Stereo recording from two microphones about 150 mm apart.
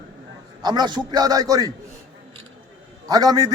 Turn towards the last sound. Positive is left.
turn(degrees=-25)  # may be behind; listen again after turning